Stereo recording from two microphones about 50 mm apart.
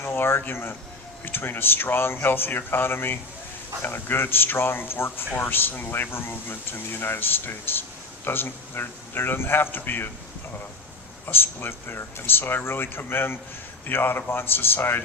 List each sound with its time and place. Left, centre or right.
0.0 s speech: left
11.3 s speech: left